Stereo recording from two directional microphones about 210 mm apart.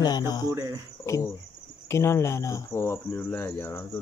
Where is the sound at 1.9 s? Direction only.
15° left (ahead or behind).